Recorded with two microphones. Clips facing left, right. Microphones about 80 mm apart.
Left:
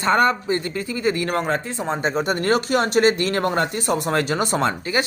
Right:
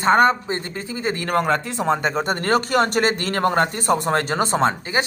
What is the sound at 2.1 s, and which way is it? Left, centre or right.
Speech, right.